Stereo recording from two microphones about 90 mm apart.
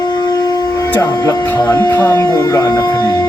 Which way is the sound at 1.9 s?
35° left (ahead or behind).